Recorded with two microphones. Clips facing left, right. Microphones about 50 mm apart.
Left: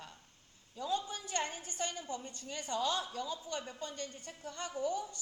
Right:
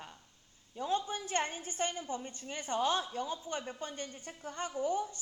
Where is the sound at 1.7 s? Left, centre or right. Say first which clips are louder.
Right 3 dB; right.